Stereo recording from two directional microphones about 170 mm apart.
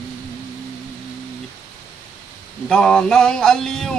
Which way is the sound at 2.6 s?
5° left (ahead or behind).